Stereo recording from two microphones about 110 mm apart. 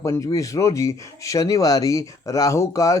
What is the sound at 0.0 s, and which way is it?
Speech, 30° left (ahead or behind).